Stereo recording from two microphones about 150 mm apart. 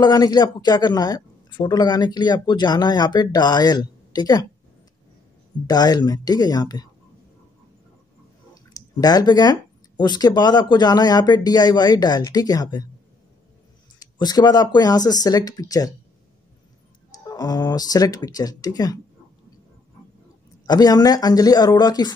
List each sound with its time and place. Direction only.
0.0 s a man's voice: 25° left (ahead or behind)
5.7 s a man's voice: 25° left (ahead or behind)
8.7 s a man's voice: 25° left (ahead or behind)
13.9 s a man's voice: 25° left (ahead or behind)
17.1 s a man's voice: 25° left (ahead or behind)
20.6 s a man's voice: 25° left (ahead or behind)